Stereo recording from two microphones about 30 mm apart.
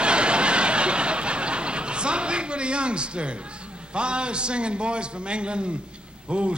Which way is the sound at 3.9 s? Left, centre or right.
Right.